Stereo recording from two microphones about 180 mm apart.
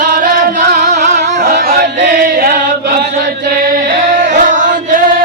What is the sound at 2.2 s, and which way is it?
Chant, 50° right (ahead or behind).